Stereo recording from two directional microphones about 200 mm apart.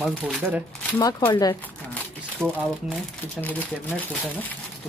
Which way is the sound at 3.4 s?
10° left (ahead or behind).